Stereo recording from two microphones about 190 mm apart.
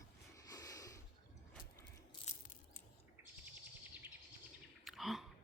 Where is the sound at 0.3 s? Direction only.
20° left (ahead or behind).